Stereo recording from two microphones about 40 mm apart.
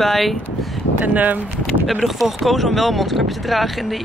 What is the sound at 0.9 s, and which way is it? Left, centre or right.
Speech, right.